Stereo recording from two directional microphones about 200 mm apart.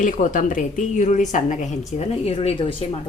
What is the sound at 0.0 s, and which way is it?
A woman's voice, 40° left (ahead or behind).